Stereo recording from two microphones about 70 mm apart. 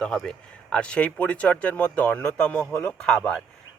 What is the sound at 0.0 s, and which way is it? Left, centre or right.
A man's voice, centre.